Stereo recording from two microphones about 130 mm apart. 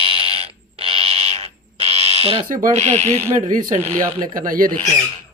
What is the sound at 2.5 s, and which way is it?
Speech, 75° right (ahead or behind).